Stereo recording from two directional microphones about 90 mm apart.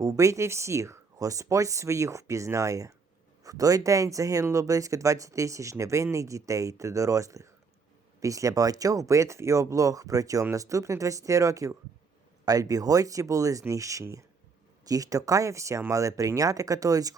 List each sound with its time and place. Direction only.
0.0 s speech: 40° right (ahead or behind)